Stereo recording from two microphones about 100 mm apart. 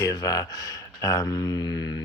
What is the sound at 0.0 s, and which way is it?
Speech, 40° left (ahead or behind).